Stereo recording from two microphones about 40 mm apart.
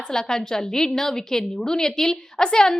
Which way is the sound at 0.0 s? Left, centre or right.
Centre.